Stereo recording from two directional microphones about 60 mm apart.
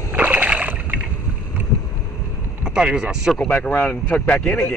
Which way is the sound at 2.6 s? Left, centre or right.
Centre.